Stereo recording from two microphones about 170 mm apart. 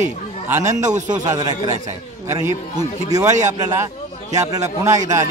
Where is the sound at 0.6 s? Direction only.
45° right (ahead or behind).